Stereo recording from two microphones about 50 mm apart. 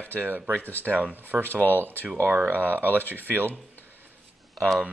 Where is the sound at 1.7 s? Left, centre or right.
Right.